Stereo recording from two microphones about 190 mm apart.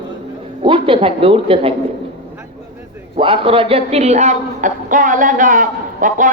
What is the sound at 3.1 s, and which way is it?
Speech, 30° right (ahead or behind).